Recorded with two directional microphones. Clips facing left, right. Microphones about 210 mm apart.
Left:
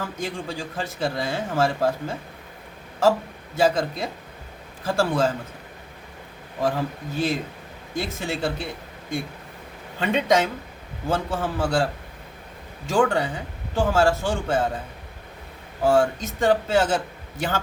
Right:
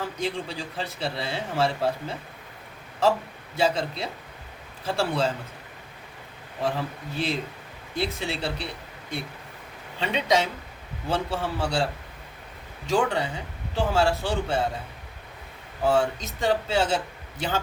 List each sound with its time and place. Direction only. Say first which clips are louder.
0.0 s a man's voice: even; 45° left (ahead or behind)
6.6 s a man's voice: left 4 dB; 45° left (ahead or behind)
12.9 s a man's voice: left 3 dB; 50° left (ahead or behind)
15.9 s a man's voice: left 3 dB; 50° left (ahead or behind)